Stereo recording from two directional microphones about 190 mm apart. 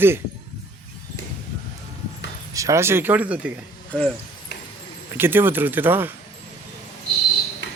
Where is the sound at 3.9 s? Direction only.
5° left (ahead or behind).